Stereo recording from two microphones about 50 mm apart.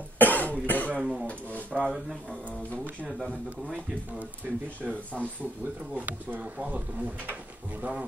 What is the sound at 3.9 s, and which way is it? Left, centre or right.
Speech, right.